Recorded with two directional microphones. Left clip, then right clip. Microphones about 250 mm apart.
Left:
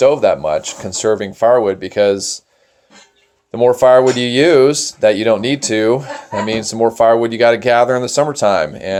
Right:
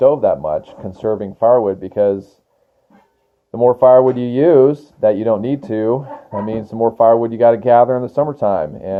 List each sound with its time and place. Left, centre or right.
0.0 s speech: centre
3.5 s speech: centre